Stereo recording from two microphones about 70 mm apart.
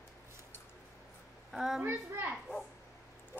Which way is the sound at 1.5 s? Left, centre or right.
Centre.